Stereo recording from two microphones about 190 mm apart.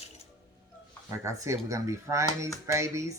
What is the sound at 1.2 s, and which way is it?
Speech, 15° right (ahead or behind).